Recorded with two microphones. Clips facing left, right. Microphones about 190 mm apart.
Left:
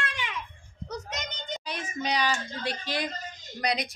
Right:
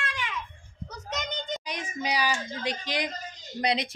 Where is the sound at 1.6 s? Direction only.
15° right (ahead or behind).